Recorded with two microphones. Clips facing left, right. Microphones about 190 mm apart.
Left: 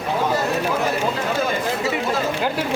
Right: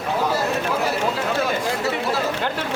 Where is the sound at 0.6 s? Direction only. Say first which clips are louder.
Left 1 dB; 5° left (ahead or behind).